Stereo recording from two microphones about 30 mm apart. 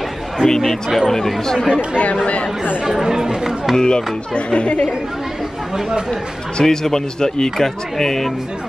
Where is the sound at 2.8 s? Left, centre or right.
Centre.